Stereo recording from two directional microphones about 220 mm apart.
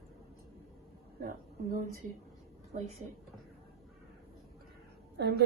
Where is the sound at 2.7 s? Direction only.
45° right (ahead or behind).